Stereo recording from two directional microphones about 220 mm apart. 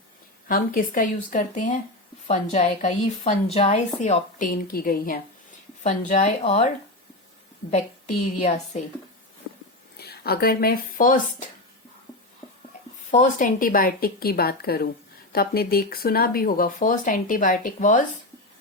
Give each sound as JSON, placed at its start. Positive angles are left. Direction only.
{"t": 0.4, "sound": "a woman's voice", "side_deg": 40}
{"t": 8.4, "sound": "a woman's voice", "side_deg": 30}
{"t": 10.0, "sound": "a woman's voice", "side_deg": 45}
{"t": 13.1, "sound": "a woman's voice", "side_deg": 35}